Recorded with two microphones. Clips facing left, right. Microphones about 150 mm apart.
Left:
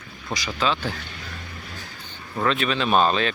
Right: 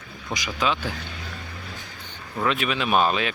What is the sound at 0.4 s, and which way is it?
Speech, 15° right (ahead or behind).